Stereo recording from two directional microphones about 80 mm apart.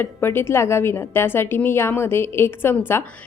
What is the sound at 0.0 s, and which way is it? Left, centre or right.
A woman's voice, left.